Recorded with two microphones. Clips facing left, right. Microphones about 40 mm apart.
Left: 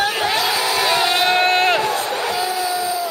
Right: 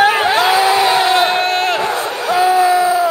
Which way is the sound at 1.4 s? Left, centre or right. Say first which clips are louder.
Even; centre.